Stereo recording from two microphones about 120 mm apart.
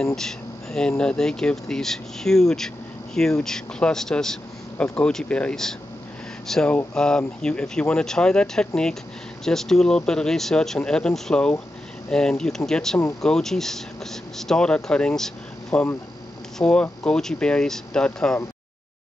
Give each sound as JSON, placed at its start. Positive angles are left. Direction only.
{"t": 0.0, "sound": "speech", "side_deg": 5}